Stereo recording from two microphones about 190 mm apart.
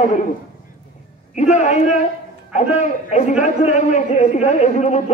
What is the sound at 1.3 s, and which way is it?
A man's voice, 40° left (ahead or behind).